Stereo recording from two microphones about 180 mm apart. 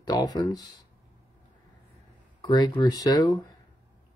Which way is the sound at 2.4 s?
20° left (ahead or behind).